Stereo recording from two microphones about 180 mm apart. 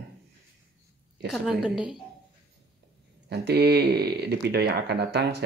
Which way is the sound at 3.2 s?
65° right (ahead or behind).